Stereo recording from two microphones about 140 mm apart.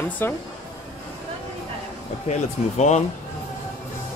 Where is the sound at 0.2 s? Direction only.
15° left (ahead or behind).